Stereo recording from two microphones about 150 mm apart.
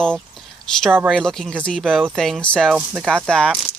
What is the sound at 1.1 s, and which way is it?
Speech, 5° left (ahead or behind).